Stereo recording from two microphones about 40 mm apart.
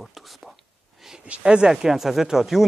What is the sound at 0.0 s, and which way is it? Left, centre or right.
Whispering, centre.